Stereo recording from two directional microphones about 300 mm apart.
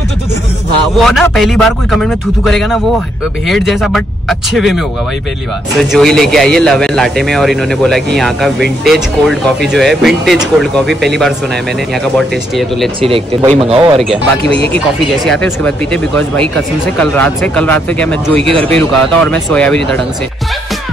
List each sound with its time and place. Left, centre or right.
0.9 s a man's voice: centre
13.0 s speech: centre
14.7 s a man's voice: centre
18.4 s speech: centre
18.8 s a man's voice: centre